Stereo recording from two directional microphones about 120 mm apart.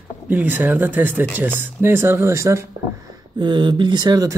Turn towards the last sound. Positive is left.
turn(degrees=-30)  # may be behind; listen again after turning